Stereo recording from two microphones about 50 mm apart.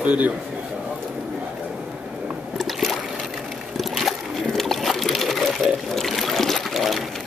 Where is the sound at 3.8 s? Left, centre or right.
Centre.